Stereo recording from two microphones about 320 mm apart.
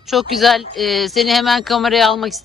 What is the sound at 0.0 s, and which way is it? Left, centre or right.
Speech, centre.